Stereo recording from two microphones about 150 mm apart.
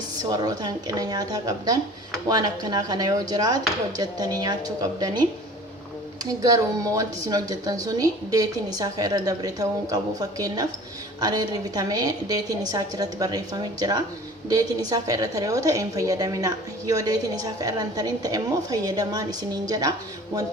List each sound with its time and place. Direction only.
0.2 s a woman's voice: 25° right (ahead or behind)
6.2 s a woman's voice: 25° right (ahead or behind)